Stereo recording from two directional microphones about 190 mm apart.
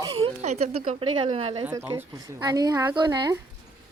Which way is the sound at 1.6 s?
15° right (ahead or behind).